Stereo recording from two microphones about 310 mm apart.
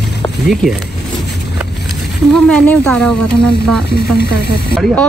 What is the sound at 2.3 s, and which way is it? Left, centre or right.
Speech, centre.